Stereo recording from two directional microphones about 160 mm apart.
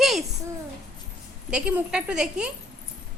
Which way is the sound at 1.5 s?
5° right (ahead or behind).